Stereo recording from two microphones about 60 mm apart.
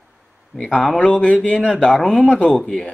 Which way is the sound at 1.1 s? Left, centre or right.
Left.